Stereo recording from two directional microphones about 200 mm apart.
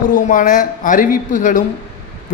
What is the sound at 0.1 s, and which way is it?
A man's voice, 40° left (ahead or behind).